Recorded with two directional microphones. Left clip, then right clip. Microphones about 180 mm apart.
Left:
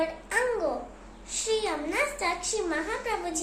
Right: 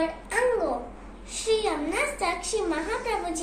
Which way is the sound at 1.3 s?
25° left (ahead or behind).